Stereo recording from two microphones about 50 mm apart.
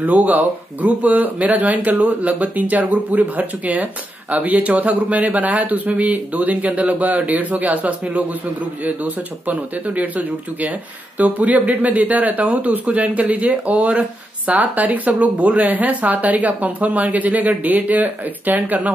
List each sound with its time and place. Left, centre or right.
0.0 s speech: right